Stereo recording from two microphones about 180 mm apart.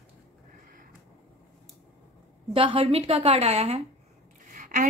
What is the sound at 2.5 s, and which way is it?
A woman's voice, 30° right (ahead or behind).